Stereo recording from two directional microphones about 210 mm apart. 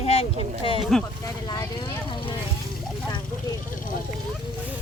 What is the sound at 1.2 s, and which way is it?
Speech, 15° left (ahead or behind).